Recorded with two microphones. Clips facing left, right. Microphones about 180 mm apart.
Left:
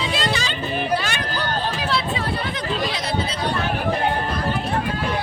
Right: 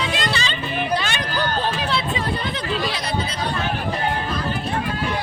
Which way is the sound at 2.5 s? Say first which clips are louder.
Even; 20° left (ahead or behind).